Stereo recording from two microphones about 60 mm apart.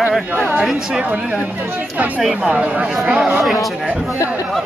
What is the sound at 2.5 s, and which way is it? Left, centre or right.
Speech, right.